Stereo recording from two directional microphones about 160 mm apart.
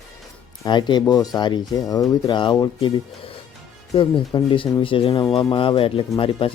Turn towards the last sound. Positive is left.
turn(degrees=35)  # may be behind; listen again after turning